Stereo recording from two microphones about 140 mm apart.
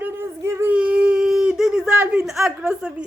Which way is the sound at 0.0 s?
20° right (ahead or behind).